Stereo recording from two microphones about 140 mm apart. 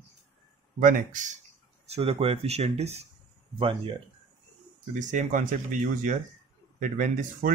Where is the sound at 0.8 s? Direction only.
65° right (ahead or behind).